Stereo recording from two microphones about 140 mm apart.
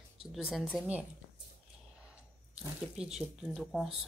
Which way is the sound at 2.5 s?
5° right (ahead or behind).